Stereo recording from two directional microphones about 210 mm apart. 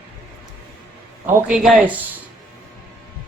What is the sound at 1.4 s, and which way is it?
Speech, 5° right (ahead or behind).